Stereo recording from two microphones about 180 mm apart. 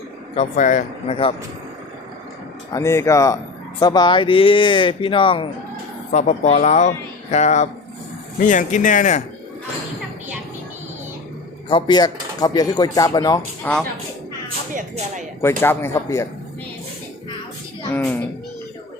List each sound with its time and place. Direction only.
0.3 s speech: 45° left (ahead or behind)
2.7 s speech: 15° left (ahead or behind); by 9.2 s 45° left (ahead or behind)
11.7 s speech: 25° left (ahead or behind)
13.6 s speech: 10° left (ahead or behind)
14.8 s speech: 40° right (ahead or behind)
15.4 s speech: 15° left (ahead or behind)
17.9 s speech: 10° left (ahead or behind)